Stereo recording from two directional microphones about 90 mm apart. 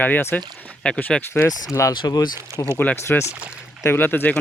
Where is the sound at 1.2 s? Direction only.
35° left (ahead or behind).